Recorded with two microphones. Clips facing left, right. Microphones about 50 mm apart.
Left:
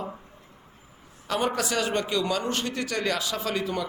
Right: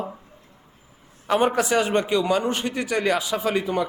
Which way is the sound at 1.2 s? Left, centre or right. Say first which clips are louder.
Right 6 dB; right.